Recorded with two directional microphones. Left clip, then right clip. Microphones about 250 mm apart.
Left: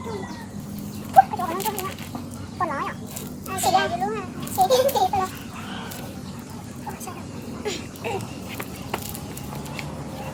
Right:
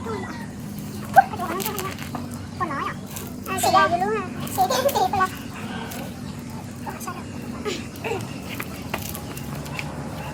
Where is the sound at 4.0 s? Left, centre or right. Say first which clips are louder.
Right 3 dB; right.